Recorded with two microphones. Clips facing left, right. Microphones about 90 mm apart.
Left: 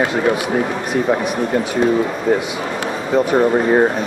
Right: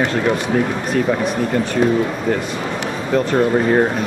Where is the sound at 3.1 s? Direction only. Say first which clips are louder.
Left 2 dB; 10° left (ahead or behind).